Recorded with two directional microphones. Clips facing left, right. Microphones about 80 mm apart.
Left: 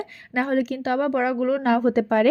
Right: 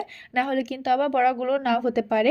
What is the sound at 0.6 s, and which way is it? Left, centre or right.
A woman's voice, left.